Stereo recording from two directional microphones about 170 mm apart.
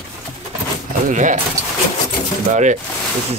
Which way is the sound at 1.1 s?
50° right (ahead or behind).